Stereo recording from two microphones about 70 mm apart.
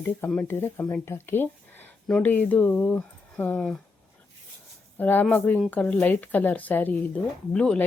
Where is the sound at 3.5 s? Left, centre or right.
Centre.